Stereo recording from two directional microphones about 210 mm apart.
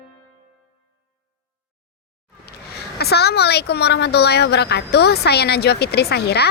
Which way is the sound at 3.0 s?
50° left (ahead or behind).